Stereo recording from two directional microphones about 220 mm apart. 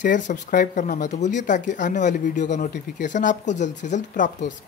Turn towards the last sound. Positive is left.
turn(degrees=35)  # may be behind; listen again after turning